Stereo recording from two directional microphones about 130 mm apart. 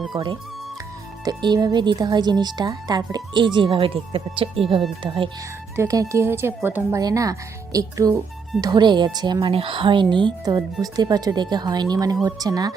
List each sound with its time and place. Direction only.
1.2 s speech: 35° right (ahead or behind)
5.7 s speech: 25° right (ahead or behind)